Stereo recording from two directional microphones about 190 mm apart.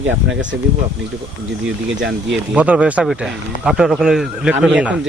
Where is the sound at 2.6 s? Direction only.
5° right (ahead or behind).